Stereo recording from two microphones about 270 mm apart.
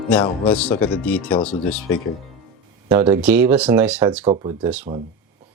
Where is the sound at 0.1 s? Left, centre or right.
Centre.